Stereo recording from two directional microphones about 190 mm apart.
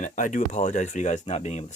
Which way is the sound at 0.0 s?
40° left (ahead or behind).